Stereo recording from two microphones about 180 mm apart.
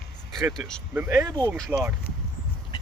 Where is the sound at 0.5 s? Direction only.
5° left (ahead or behind).